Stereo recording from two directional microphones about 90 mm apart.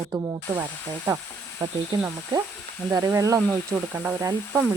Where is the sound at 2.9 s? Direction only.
35° right (ahead or behind).